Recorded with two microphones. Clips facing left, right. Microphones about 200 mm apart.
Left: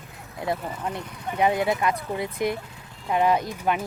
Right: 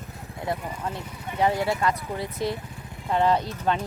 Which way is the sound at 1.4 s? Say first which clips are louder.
Left 1 dB; 20° left (ahead or behind).